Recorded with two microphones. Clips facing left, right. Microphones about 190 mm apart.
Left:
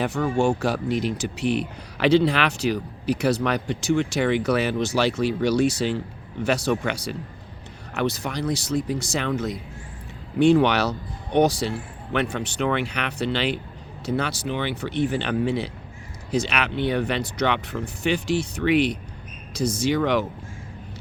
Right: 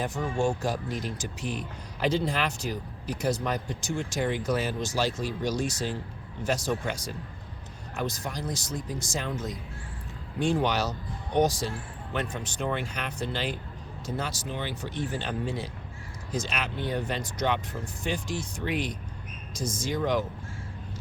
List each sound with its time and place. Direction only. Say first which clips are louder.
0.0 s a man's voice: left 6 dB; 70° left (ahead or behind)